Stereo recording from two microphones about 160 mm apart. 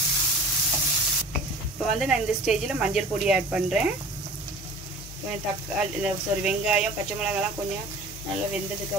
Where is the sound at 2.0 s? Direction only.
5° right (ahead or behind).